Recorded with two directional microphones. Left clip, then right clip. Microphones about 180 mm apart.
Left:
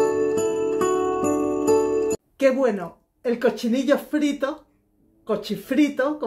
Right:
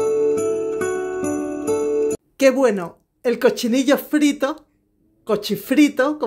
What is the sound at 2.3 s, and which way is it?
Speech, 40° right (ahead or behind).